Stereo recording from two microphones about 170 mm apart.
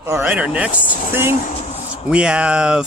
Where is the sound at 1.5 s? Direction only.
35° left (ahead or behind).